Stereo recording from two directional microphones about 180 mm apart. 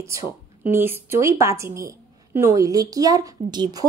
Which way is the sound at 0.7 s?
10° right (ahead or behind).